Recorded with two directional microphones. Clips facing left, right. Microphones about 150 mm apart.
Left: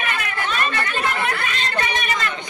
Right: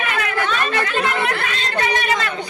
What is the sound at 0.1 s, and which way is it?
Chatter, 90° right.